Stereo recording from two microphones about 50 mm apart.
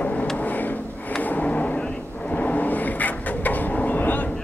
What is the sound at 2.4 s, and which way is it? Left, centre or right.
Vehicle, left.